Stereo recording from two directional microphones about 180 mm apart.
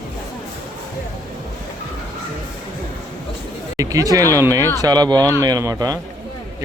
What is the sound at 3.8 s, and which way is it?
Speech, 20° right (ahead or behind).